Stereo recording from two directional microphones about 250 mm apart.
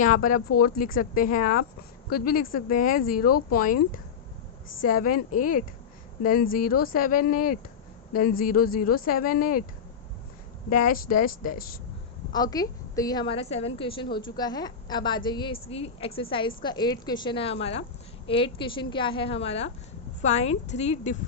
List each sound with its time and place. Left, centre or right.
0.0 s speech: left
4.8 s speech: left
10.7 s speech: left
12.3 s a woman's voice: centre